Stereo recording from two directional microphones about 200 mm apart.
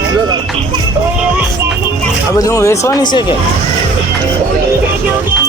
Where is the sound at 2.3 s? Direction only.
15° left (ahead or behind).